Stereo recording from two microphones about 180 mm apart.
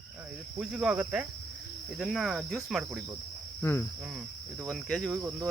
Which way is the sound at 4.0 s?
5° right (ahead or behind).